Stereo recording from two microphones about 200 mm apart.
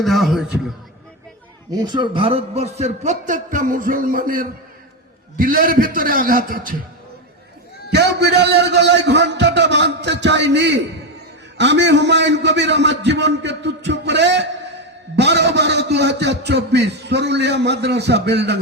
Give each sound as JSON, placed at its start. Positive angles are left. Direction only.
{"t": 0.0, "sound": "a man's voice", "side_deg": 0}
{"t": 1.7, "sound": "a man's voice", "side_deg": -20}
{"t": 7.9, "sound": "a man's voice", "side_deg": -55}